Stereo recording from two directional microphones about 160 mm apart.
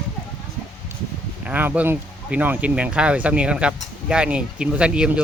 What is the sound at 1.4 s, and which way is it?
Speech, 10° right (ahead or behind).